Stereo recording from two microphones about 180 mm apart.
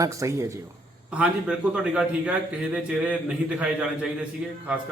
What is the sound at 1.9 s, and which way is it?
Speech, 5° right (ahead or behind).